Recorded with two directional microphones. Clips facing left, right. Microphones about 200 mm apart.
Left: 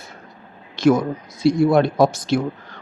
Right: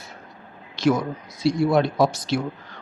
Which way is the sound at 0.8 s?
50° left (ahead or behind).